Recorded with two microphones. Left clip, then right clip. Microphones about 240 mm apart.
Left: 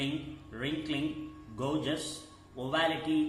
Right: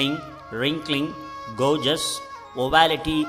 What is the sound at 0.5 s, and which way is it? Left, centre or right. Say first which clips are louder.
A man's voice: right 11 dB; right.